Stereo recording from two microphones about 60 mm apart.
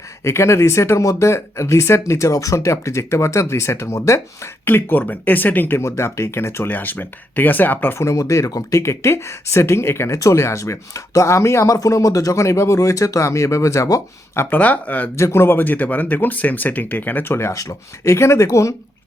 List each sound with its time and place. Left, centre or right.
0.3 s speech: left
4.6 s speech: left
5.8 s speech: left
6.7 s speech: left
8.1 s speech: left
8.8 s speech: left
10.2 s speech: left
14.5 s speech: left
15.1 s speech: left
17.5 s speech: left